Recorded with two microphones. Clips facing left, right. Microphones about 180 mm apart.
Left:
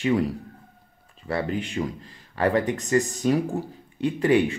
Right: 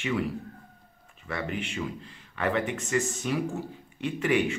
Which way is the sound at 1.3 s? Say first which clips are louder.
Left 6 dB; 35° left (ahead or behind).